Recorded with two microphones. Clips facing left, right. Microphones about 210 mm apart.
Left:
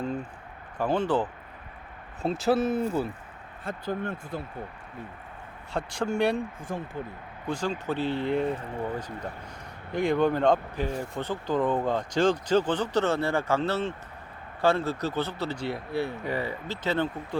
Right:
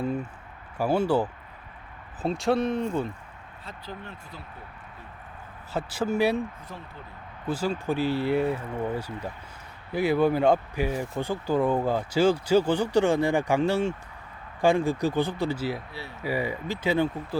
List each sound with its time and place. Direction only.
0.8 s speech: 10° right (ahead or behind)
2.2 s speech: centre (ahead or behind)
3.6 s speech: 50° left (ahead or behind)
5.7 s speech: 5° right (ahead or behind)
6.7 s speech: 50° left (ahead or behind)
7.4 s speech: 5° right (ahead or behind)
15.9 s speech: 55° left (ahead or behind)
16.2 s speech: 10° right (ahead or behind)